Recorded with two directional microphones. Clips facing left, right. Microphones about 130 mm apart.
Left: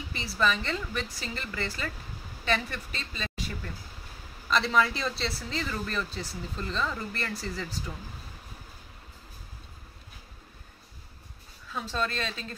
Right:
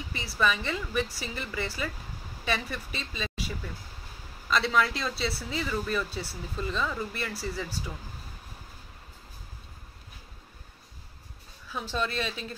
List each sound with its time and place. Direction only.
0.3 s a woman's voice: 5° right (ahead or behind)
11.7 s a woman's voice: 15° right (ahead or behind)